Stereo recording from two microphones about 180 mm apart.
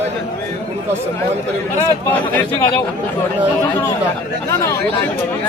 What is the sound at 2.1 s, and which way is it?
Speech, 10° left (ahead or behind).